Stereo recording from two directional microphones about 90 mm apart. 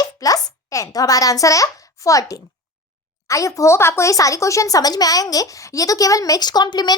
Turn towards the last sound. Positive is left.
turn(degrees=50)  # may be behind; listen again after turning